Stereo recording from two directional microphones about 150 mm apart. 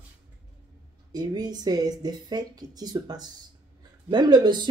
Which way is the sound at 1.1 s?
25° right (ahead or behind).